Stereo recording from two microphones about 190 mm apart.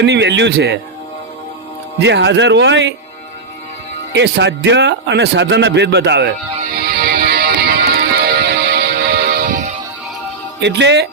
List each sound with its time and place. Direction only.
0.0 s speech: 65° right (ahead or behind)
2.0 s speech: 65° right (ahead or behind)
4.2 s speech: 65° right (ahead or behind)
6.6 s music: 55° right (ahead or behind)
10.6 s speech: 65° right (ahead or behind)